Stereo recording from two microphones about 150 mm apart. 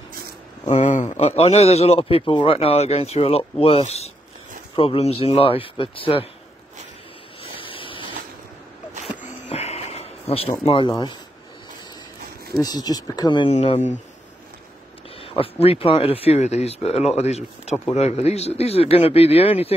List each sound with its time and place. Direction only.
0.7 s speech: 50° left (ahead or behind); by 6.2 s 35° left (ahead or behind)
7.5 s a sound: 35° left (ahead or behind)
9.5 s a sound: 45° left (ahead or behind)
10.6 s speech: 40° left (ahead or behind)
12.5 s speech: 25° left (ahead or behind)
15.1 s speech: 40° left (ahead or behind)